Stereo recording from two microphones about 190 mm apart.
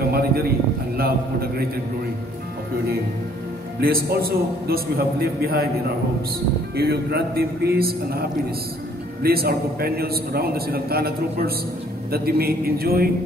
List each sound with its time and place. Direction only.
0.0 s a sound: 55° right (ahead or behind)
0.9 s a man's voice: 55° right (ahead or behind)
3.8 s a man's voice: 50° right (ahead or behind)
6.8 s a man's voice: 55° right (ahead or behind)